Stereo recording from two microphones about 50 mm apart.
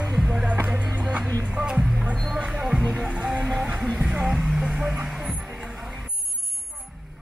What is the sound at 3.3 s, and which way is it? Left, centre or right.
Music, centre.